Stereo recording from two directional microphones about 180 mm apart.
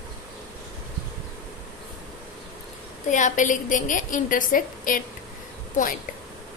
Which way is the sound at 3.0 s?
45° left (ahead or behind).